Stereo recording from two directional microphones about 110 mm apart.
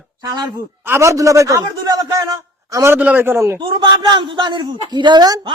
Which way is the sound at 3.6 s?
40° right (ahead or behind).